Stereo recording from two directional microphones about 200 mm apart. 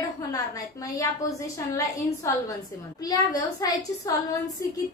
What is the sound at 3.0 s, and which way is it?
A woman's voice, 20° left (ahead or behind).